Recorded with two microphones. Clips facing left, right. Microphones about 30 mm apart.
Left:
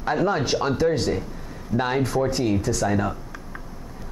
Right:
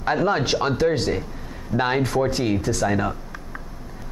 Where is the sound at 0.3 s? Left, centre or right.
Right.